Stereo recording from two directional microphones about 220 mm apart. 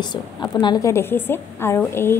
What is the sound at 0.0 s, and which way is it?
A woman's voice, 20° left (ahead or behind).